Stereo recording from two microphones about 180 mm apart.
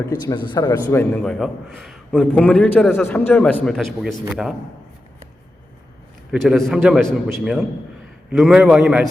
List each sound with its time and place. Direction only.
0.2 s a man's voice: 25° left (ahead or behind)
0.9 s a man's voice: 10° left (ahead or behind)
6.3 s a man's voice: centre (ahead or behind)